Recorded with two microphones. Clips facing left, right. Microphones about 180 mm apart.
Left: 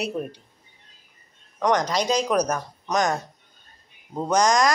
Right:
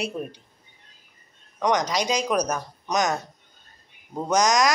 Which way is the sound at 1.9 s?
10° right (ahead or behind).